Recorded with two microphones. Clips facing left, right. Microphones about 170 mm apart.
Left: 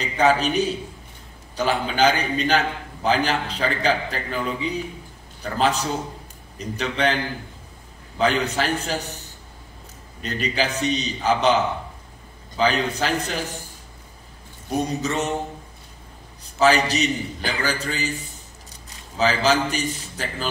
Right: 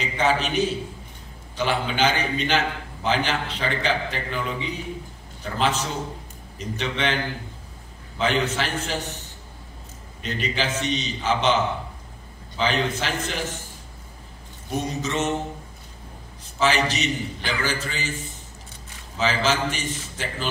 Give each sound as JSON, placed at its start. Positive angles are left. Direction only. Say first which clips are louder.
{"t": 0.0, "sound": "a man's voice", "louder": "left 4 dB", "side_deg": 40}
{"t": 8.2, "sound": "a man's voice", "louder": "left 2 dB", "side_deg": 40}
{"t": 10.2, "sound": "a man's voice", "louder": "left 2 dB", "side_deg": 40}
{"t": 14.7, "sound": "a man's voice", "louder": "left 3 dB", "side_deg": 35}
{"t": 16.5, "sound": "a man's voice", "louder": "left 4 dB", "side_deg": 40}